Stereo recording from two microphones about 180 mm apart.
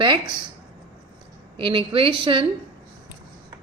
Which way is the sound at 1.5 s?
30° right (ahead or behind).